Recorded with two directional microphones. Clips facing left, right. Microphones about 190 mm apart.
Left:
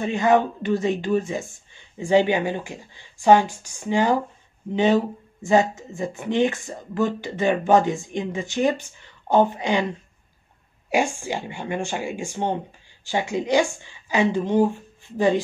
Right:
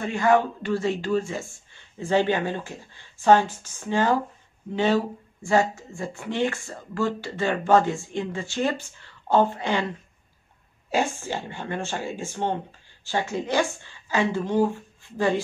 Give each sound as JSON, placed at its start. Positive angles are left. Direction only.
{"t": 0.0, "sound": "speech", "side_deg": 20}